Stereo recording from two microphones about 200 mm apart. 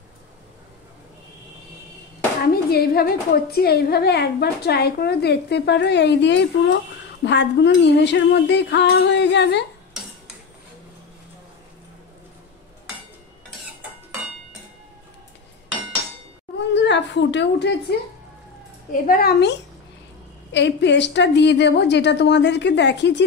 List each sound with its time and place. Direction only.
2.5 s a woman's voice: 50° left (ahead or behind)
16.5 s a sound: 60° left (ahead or behind)
18.9 s a woman's voice: 45° left (ahead or behind)